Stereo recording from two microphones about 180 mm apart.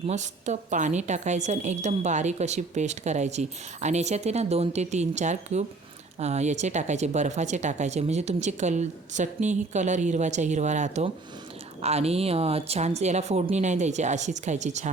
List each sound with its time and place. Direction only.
0.1 s a woman's voice: 40° right (ahead or behind)